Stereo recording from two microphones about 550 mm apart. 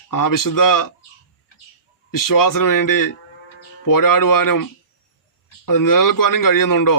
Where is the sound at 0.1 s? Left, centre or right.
Left.